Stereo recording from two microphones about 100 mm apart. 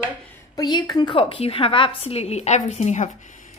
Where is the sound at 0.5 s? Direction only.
40° left (ahead or behind); by 2.9 s 90° left.